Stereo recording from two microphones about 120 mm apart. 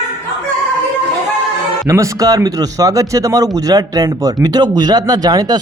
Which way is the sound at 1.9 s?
30° right (ahead or behind).